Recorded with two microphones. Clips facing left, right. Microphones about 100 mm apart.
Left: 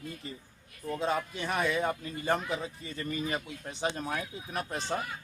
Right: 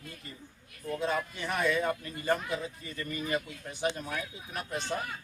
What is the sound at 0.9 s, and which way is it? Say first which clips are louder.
A man's voice: left 1 dB; 25° left (ahead or behind).